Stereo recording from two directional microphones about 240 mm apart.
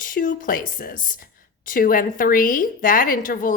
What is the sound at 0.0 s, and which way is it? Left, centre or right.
A woman's voice, left.